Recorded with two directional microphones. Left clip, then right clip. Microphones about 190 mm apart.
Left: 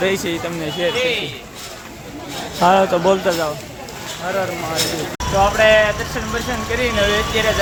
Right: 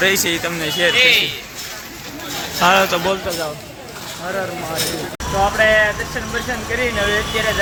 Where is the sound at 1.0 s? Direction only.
45° left (ahead or behind).